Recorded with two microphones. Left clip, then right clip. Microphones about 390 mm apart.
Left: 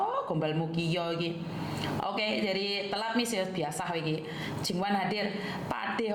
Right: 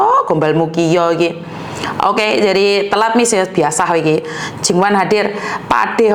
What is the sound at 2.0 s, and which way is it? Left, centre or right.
A woman's voice, right.